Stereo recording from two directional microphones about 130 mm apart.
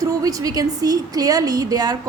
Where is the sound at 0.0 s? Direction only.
25° right (ahead or behind).